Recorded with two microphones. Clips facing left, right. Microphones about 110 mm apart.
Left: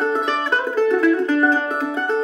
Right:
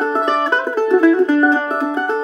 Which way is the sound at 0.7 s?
30° right (ahead or behind).